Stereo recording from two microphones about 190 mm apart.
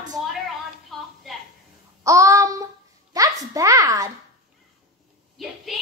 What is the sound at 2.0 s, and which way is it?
A woman's voice, 15° right (ahead or behind).